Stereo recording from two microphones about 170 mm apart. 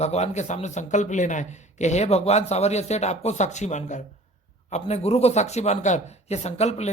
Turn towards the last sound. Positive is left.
turn(degrees=40)  # may be behind; listen again after turning